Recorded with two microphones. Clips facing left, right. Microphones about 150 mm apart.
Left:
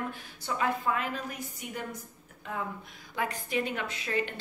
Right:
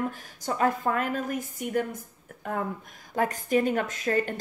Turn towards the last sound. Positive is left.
turn(degrees=-45)  # may be behind; listen again after turning